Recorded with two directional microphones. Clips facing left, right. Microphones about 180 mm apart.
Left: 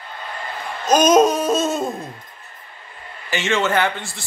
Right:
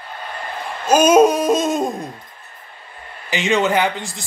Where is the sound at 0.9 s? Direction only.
10° right (ahead or behind).